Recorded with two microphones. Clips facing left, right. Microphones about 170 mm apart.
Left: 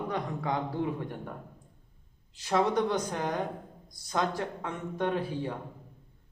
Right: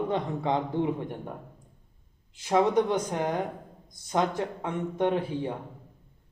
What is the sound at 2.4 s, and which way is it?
A man's voice, 15° right (ahead or behind).